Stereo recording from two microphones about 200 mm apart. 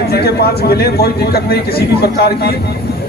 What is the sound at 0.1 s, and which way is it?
A man's voice, 50° left (ahead or behind).